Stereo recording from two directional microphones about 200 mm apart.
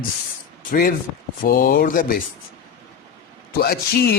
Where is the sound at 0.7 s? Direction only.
45° left (ahead or behind).